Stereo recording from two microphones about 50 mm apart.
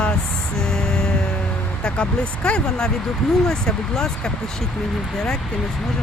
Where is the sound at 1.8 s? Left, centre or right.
Centre.